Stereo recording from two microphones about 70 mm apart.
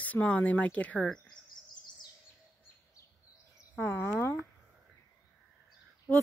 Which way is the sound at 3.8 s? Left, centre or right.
Left.